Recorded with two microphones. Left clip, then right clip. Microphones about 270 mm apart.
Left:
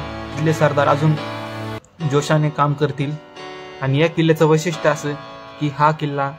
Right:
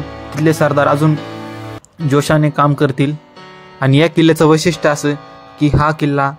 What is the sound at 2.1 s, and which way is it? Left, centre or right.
Speech, right.